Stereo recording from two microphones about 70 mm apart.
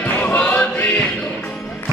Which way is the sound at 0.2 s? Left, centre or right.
Centre.